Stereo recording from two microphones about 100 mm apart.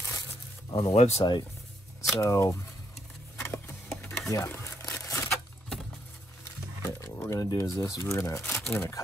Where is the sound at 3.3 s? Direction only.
25° left (ahead or behind).